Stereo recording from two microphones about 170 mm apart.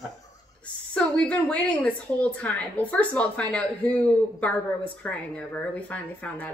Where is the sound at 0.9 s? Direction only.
5° left (ahead or behind).